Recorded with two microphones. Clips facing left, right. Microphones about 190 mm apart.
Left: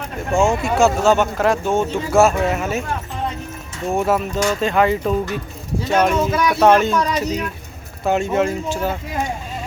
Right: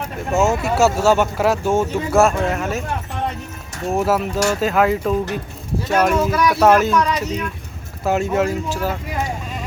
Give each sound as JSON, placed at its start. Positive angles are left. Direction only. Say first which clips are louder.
{"t": 0.3, "sound": "speech", "louder": "left 1 dB", "side_deg": -5}
{"t": 3.9, "sound": "speech", "louder": "even", "side_deg": -5}